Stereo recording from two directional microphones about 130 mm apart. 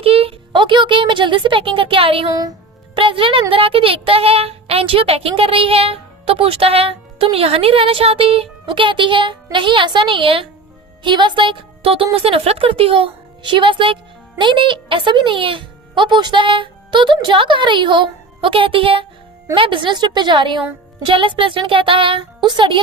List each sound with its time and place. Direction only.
0.0 s a woman's voice: 45° right (ahead or behind)